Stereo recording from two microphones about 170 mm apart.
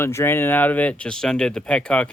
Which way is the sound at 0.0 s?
15° left (ahead or behind).